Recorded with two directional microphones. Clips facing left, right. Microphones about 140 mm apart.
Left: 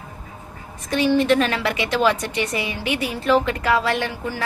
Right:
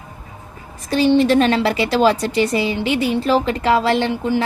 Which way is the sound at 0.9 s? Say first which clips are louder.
Right 3 dB; 30° right (ahead or behind).